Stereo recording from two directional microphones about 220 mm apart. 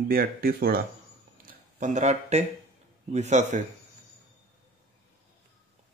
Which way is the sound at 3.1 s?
30° right (ahead or behind).